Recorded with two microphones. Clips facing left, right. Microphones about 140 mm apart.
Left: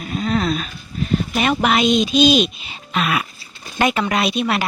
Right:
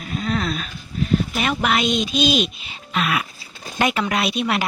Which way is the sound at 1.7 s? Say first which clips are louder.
Left 5 dB; centre (ahead or behind).